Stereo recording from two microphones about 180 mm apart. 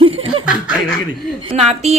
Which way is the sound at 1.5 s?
35° right (ahead or behind).